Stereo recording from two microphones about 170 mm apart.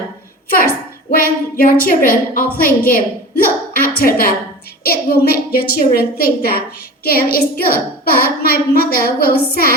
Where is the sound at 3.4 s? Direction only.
55° left (ahead or behind).